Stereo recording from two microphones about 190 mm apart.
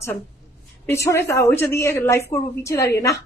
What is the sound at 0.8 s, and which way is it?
Speech, 15° left (ahead or behind).